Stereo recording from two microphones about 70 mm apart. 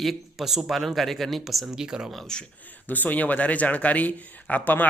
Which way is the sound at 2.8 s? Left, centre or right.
Left.